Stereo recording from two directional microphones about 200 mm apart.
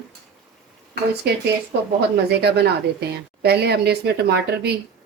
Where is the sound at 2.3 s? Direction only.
55° right (ahead or behind).